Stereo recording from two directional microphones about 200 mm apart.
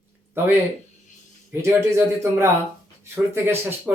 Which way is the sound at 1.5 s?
10° right (ahead or behind).